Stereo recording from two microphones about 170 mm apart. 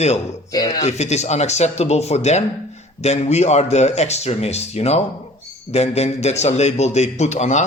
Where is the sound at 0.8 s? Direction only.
40° left (ahead or behind).